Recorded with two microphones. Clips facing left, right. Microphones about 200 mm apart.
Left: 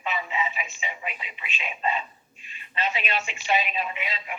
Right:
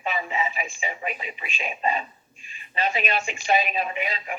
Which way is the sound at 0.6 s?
45° right (ahead or behind).